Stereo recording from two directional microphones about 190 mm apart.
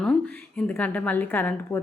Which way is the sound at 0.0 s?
5° left (ahead or behind).